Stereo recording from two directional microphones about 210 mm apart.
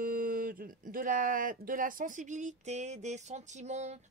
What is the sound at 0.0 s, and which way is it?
Speech, 40° right (ahead or behind).